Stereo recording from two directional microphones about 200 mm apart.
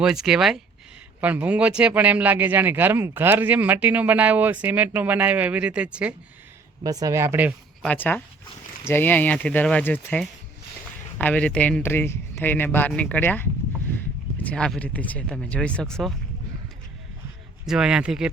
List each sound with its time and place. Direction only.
0.0 s speech: 5° right (ahead or behind)
6.8 s speech: 15° right (ahead or behind)
7.8 s a woman's voice: 10° left (ahead or behind)
17.7 s speech: 5° right (ahead or behind)